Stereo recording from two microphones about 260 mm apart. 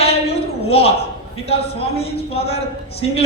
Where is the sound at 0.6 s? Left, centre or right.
Left.